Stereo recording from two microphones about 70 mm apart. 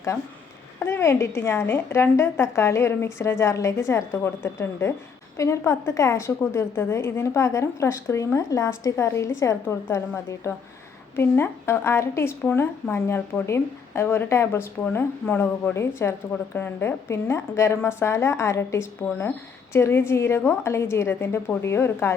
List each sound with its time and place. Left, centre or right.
0.8 s a woman's voice: left
15.7 s speech: left